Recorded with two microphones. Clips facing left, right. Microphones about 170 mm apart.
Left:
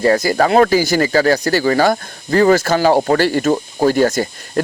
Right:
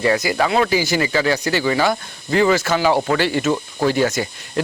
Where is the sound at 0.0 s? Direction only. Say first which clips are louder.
Left 4 dB; 40° left (ahead or behind).